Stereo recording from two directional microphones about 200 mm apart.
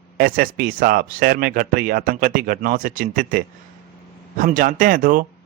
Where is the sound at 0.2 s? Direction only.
45° right (ahead or behind).